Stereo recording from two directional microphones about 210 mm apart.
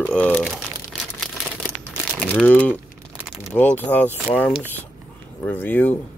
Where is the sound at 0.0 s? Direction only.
5° left (ahead or behind).